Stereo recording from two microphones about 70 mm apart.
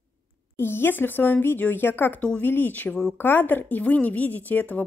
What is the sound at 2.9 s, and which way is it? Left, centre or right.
Speech, centre.